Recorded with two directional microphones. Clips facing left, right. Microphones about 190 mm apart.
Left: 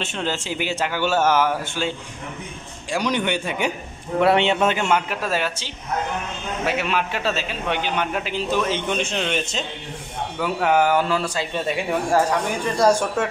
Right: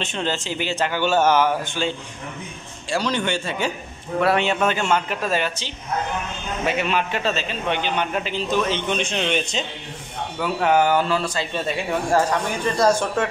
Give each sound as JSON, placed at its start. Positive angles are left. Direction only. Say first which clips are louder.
{"t": 0.0, "sound": "a man's voice", "louder": "right 1 dB", "side_deg": 5}